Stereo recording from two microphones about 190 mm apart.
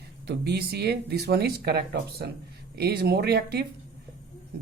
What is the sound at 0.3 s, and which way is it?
Speech, 60° right (ahead or behind).